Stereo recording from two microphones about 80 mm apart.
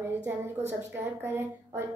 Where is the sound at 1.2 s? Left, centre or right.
Right.